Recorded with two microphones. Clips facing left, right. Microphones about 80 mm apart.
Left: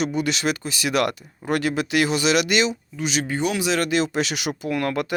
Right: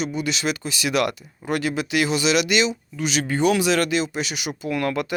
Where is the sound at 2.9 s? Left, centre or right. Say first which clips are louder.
Right 1 dB; left.